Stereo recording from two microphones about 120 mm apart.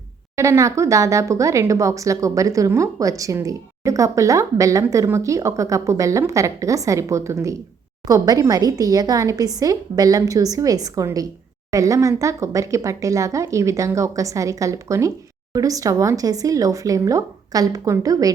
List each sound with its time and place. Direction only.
0.3 s a woman's voice: 25° right (ahead or behind)